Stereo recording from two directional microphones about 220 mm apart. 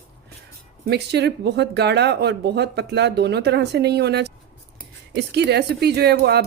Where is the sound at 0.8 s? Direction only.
50° right (ahead or behind).